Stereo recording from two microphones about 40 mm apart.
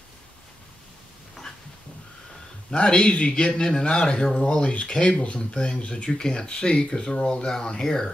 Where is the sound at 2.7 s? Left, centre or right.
Left.